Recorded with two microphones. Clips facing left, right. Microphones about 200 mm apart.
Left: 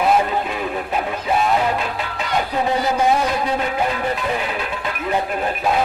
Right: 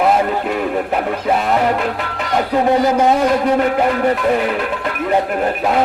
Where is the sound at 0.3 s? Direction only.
60° right (ahead or behind).